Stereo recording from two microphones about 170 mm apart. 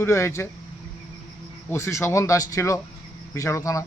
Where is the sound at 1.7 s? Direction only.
15° left (ahead or behind).